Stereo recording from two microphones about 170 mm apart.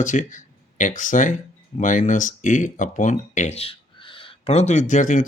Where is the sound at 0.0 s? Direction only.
50° left (ahead or behind).